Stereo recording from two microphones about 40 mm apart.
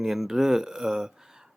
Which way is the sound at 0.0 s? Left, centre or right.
Centre.